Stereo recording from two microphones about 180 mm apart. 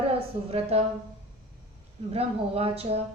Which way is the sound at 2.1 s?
35° right (ahead or behind).